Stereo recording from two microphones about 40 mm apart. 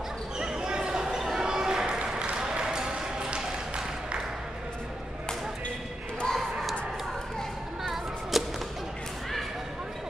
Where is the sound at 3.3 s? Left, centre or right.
Right.